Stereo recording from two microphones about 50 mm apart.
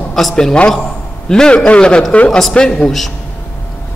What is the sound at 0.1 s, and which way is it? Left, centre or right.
A man's voice, centre.